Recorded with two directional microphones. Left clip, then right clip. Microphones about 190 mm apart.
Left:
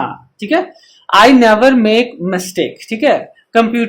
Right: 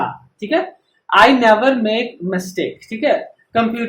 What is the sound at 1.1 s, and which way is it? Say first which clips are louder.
Speech: left 3 dB; 55° left (ahead or behind).